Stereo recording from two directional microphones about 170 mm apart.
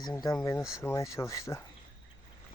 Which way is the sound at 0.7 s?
15° left (ahead or behind).